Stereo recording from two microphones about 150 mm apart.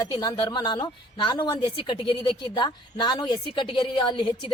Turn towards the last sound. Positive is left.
turn(degrees=35)  # may be behind; listen again after turning